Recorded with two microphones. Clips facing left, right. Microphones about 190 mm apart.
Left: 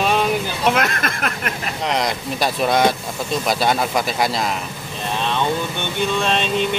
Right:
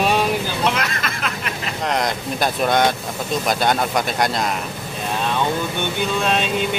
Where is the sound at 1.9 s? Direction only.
Centre (ahead or behind).